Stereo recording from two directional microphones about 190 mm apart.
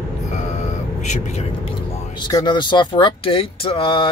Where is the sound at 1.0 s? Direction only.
40° left (ahead or behind).